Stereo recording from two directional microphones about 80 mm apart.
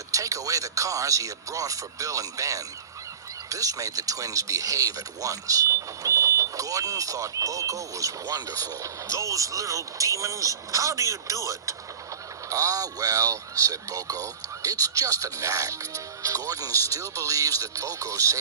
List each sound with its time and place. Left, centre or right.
0.1 s speech: right